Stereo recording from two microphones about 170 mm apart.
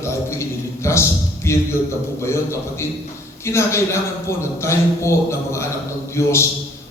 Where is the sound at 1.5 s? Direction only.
15° left (ahead or behind).